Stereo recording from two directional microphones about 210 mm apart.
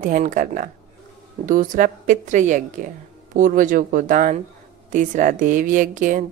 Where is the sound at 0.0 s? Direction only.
40° right (ahead or behind).